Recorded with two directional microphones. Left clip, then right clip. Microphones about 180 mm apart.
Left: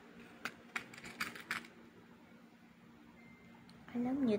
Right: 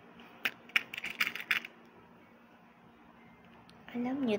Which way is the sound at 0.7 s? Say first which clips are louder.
Right 12 dB; 20° right (ahead or behind).